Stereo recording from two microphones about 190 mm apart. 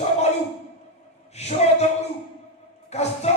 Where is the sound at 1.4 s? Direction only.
35° left (ahead or behind).